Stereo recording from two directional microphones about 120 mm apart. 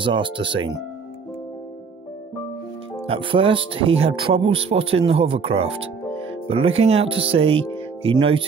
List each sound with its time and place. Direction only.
0.0 s speech: 45° right (ahead or behind)
3.1 s speech: 45° right (ahead or behind)